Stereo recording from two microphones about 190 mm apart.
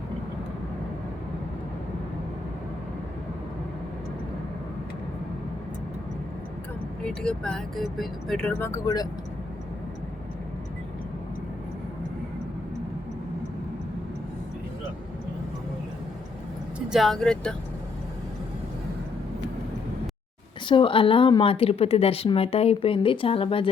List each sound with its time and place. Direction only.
7.0 s speech: 5° left (ahead or behind)
16.9 s speech: centre (ahead or behind)
20.7 s a woman's voice: 25° left (ahead or behind)